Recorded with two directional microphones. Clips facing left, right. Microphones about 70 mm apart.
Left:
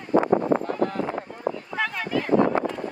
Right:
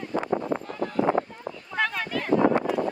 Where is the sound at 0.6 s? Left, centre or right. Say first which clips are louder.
Left 6 dB; left.